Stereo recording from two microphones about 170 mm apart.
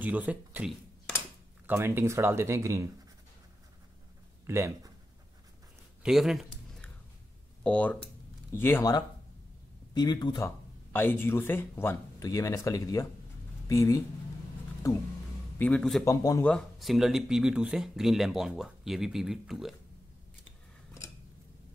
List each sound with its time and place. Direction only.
0.0 s speech: 10° right (ahead or behind)
4.5 s speech: 15° right (ahead or behind)
6.0 s a sound: centre (ahead or behind)
7.6 s speech: 10° left (ahead or behind)
9.9 s speech: 25° left (ahead or behind)
10.9 s speech: 10° left (ahead or behind)
15.6 s speech: 5° left (ahead or behind)
16.0 s speech: 20° left (ahead or behind)
16.4 s speech: centre (ahead or behind)